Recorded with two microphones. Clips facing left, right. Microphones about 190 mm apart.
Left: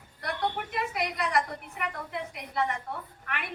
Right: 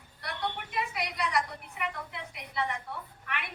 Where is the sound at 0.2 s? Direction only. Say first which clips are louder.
Left 5 dB; 45° left (ahead or behind).